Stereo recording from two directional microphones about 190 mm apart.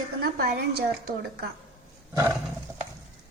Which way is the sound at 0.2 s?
55° right (ahead or behind).